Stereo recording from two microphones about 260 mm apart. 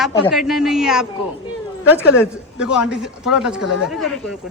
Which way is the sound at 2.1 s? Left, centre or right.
Centre.